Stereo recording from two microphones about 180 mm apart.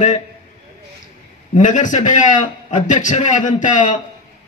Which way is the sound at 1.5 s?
45° left (ahead or behind).